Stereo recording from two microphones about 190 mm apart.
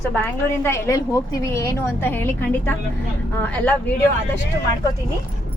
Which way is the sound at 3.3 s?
10° left (ahead or behind).